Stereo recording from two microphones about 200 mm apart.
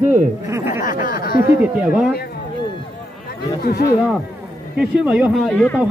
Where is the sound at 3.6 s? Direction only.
50° left (ahead or behind).